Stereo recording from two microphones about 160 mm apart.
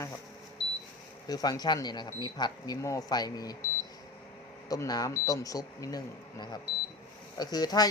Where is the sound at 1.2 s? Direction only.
25° left (ahead or behind).